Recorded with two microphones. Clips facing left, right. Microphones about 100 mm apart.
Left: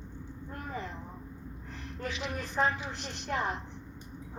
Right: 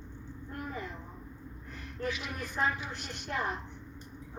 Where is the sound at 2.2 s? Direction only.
25° left (ahead or behind).